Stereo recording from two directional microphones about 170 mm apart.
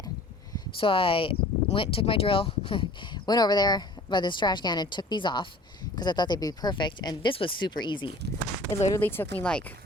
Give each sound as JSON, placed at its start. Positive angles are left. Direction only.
{"t": 0.8, "sound": "speech", "side_deg": 30}
{"t": 8.9, "sound": "speech", "side_deg": 15}